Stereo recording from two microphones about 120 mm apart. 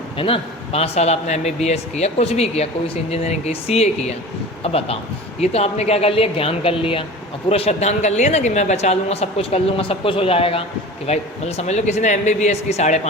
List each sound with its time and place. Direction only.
0.2 s speech: 50° left (ahead or behind)
5.4 s speech: 65° left (ahead or behind)